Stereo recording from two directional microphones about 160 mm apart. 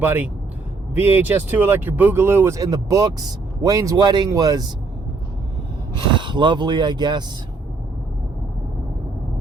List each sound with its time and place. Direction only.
0.0 s speech: 10° right (ahead or behind)
6.0 s speech: 30° right (ahead or behind)